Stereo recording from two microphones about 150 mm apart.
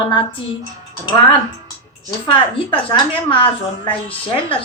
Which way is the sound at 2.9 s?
35° left (ahead or behind).